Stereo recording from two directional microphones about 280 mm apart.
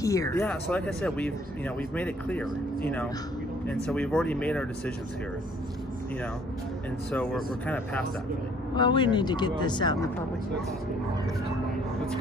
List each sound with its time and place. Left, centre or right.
0.0 s speech: centre
7.1 s speech: centre
8.7 s speech: centre